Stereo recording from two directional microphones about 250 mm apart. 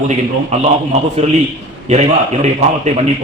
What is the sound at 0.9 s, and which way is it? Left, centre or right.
A man's voice, right.